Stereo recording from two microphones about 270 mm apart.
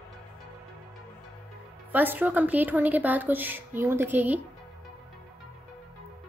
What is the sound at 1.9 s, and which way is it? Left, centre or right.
A woman's voice, centre.